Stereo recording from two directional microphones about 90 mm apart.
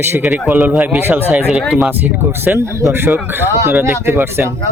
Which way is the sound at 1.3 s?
5° right (ahead or behind).